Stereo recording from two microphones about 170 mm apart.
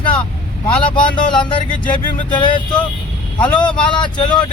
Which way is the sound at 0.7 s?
30° left (ahead or behind).